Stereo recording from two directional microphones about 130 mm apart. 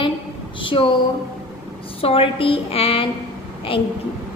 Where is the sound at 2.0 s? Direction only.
45° left (ahead or behind).